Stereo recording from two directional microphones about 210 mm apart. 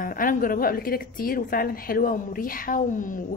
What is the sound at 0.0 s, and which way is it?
A woman's voice, 40° left (ahead or behind).